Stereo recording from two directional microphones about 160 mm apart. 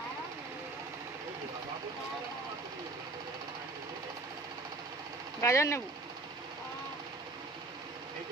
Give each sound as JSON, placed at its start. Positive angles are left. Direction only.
{"t": 5.4, "sound": "speech", "side_deg": 20}